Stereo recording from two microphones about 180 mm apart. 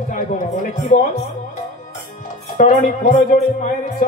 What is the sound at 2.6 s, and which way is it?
A man's voice, 45° left (ahead or behind).